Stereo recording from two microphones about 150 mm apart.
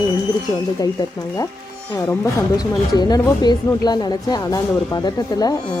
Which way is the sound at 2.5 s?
25° left (ahead or behind).